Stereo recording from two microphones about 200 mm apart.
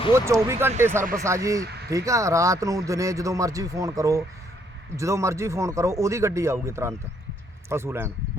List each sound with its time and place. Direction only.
0.1 s speech: 15° right (ahead or behind)